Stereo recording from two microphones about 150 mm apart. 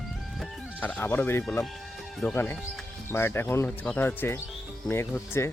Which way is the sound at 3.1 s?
15° left (ahead or behind).